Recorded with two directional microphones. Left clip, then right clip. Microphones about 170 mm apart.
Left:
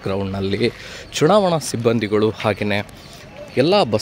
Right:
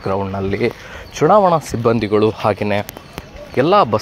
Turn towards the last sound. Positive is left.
turn(degrees=25)  # may be behind; listen again after turning